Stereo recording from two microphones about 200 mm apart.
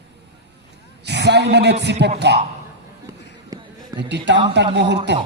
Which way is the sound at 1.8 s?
55° right (ahead or behind).